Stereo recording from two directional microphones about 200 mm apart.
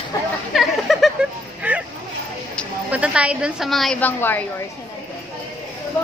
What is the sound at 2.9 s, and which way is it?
A woman's voice, 5° right (ahead or behind).